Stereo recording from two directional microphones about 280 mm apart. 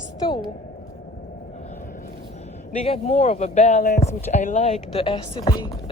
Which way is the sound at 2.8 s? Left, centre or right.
Left.